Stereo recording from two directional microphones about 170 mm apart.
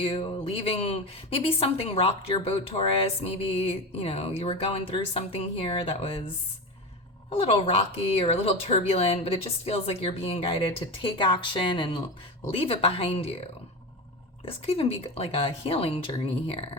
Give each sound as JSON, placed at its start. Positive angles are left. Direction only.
{"t": 0.0, "sound": "a woman's voice", "side_deg": 35}
{"t": 7.3, "sound": "a woman's voice", "side_deg": 35}
{"t": 14.4, "sound": "a woman's voice", "side_deg": 35}